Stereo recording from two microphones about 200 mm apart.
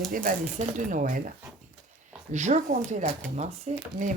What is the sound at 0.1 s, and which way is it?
Speech, 45° right (ahead or behind).